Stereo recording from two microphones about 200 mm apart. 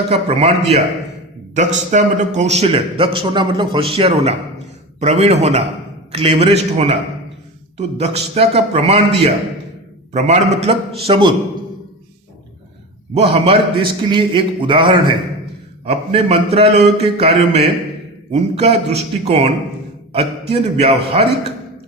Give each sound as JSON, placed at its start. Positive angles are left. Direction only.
{"t": 0.1, "sound": "a man's voice", "side_deg": -30}
{"t": 1.5, "sound": "a man's voice", "side_deg": -35}
{"t": 13.1, "sound": "a man's voice", "side_deg": -30}